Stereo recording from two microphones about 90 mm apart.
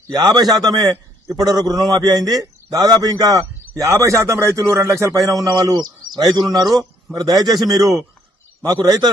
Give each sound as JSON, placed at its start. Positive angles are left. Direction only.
{"t": 0.1, "sound": "a man's voice", "side_deg": -45}
{"t": 5.5, "sound": "a man's voice", "side_deg": -50}